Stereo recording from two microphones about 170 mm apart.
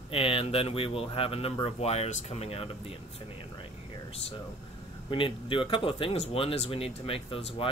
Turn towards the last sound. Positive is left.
turn(degrees=35)  # may be behind; listen again after turning